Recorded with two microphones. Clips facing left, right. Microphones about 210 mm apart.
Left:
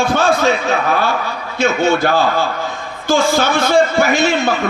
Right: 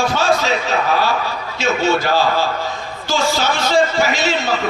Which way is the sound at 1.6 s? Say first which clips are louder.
Left 3 dB; 55° left (ahead or behind).